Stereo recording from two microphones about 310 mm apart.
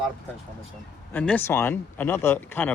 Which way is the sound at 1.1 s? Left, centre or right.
Centre.